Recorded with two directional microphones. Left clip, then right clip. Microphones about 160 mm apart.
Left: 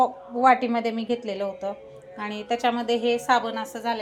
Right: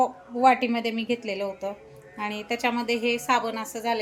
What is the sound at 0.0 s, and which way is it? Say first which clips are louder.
A woman's voice: left 1 dB; 10° right (ahead or behind).